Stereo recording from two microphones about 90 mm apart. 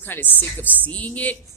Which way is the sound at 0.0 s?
20° left (ahead or behind).